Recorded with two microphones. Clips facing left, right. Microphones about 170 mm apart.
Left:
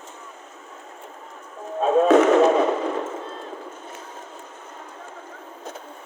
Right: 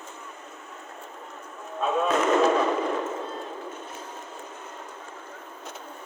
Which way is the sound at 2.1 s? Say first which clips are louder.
Left 6 dB; 70° left (ahead or behind).